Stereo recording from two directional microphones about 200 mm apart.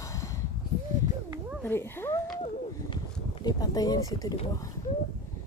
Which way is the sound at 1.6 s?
10° left (ahead or behind).